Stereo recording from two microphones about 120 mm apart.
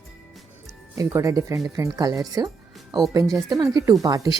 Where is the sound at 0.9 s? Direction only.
25° right (ahead or behind).